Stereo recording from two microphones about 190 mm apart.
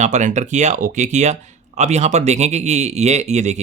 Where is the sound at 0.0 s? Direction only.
40° right (ahead or behind).